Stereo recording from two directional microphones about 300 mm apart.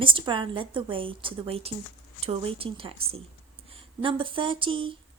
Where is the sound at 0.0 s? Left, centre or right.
Centre.